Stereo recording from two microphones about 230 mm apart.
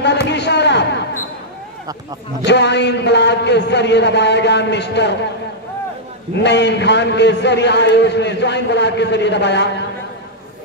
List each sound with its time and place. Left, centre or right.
0.3 s a sound: left
2.4 s a man's voice: left
6.4 s a man's voice: left